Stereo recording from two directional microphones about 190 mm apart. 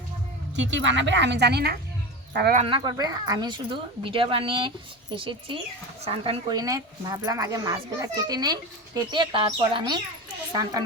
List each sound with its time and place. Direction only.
0.5 s a woman's voice: 75° right (ahead or behind)
2.6 s speech: 25° right (ahead or behind)